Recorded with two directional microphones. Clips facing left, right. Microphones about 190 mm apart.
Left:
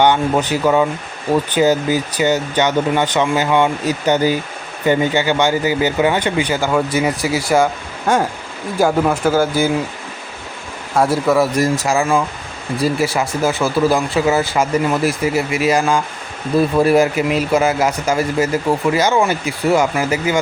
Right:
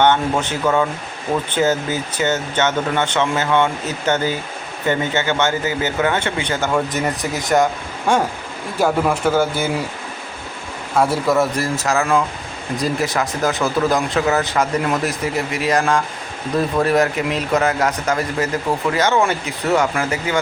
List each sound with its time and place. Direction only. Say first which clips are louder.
0.0 s a man's voice: left 2 dB; 10° left (ahead or behind)
10.9 s a man's voice: left 2 dB; 5° left (ahead or behind)